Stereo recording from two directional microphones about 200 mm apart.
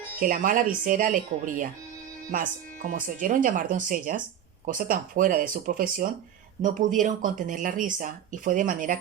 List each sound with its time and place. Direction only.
0.2 s speech: 40° right (ahead or behind)